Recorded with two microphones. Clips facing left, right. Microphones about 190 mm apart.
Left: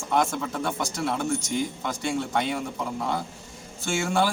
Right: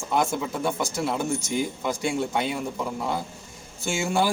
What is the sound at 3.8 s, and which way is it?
Speech, 10° right (ahead or behind).